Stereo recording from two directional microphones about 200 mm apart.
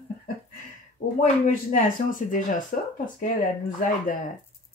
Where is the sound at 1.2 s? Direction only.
40° left (ahead or behind).